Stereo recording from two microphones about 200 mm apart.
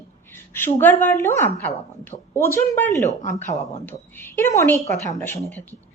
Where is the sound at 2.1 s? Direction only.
30° left (ahead or behind).